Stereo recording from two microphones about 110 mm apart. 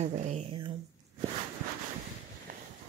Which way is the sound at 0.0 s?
90° right.